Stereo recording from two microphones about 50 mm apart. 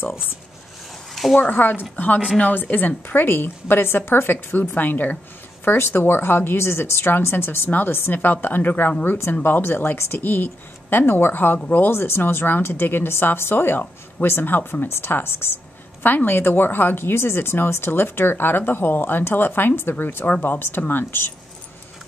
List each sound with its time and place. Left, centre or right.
1.1 s a sound: centre
1.4 s speech: left
5.7 s speech: left
11.9 s speech: left